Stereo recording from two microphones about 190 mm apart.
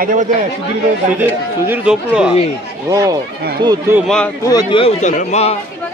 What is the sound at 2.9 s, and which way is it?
Speech, 20° right (ahead or behind).